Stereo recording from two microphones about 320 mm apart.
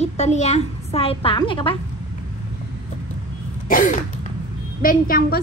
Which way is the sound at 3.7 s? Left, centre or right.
Left.